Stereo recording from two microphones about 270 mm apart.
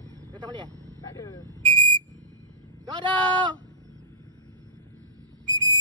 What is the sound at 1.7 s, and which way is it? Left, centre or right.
Whistle, centre.